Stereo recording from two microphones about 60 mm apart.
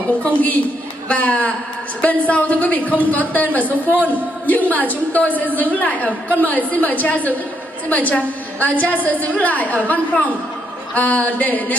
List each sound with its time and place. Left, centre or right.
0.2 s a woman's voice: left